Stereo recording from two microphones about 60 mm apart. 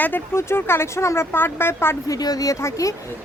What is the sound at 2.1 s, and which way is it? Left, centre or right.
Speech, left.